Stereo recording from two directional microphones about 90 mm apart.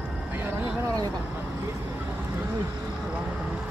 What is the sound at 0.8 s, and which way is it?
Vehicle, 40° right (ahead or behind).